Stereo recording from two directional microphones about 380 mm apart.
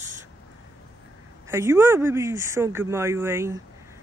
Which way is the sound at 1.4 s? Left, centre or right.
Centre.